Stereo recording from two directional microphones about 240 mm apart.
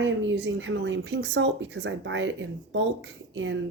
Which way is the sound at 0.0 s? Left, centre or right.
Right.